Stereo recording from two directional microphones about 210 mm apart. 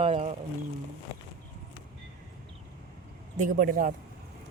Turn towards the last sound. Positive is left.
turn(degrees=-40)  # may be behind; listen again after turning